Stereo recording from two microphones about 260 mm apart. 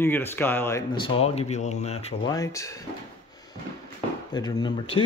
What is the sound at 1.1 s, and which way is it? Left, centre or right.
Speech, left.